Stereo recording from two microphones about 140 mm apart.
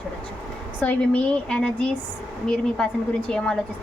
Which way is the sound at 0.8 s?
10° left (ahead or behind).